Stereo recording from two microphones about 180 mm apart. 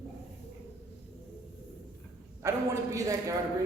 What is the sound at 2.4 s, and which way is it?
Speech, 15° right (ahead or behind).